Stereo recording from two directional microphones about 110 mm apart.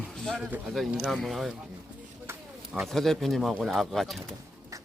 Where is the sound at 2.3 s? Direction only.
20° right (ahead or behind).